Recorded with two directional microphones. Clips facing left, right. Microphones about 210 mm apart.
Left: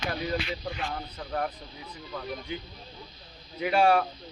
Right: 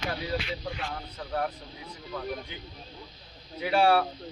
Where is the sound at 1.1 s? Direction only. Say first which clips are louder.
Right 2 dB; 5° left (ahead or behind).